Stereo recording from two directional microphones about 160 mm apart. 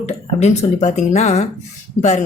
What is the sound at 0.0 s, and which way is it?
Speech, 45° left (ahead or behind).